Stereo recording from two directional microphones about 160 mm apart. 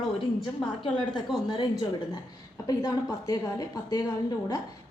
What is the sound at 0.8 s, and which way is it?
A woman's voice, 30° left (ahead or behind).